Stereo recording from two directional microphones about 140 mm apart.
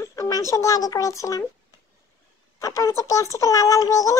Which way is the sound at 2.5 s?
20° left (ahead or behind).